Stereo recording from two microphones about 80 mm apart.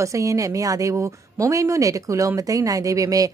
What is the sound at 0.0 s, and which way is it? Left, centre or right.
Speech, right.